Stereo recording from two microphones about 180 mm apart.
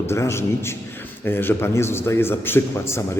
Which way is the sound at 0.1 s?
15° left (ahead or behind).